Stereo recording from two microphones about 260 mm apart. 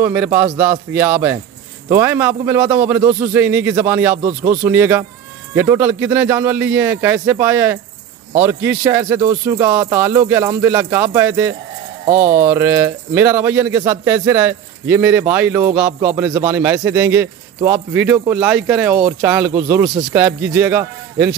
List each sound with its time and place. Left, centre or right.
0.0 s speech: centre
4.2 s speech: right
4.5 s speech: centre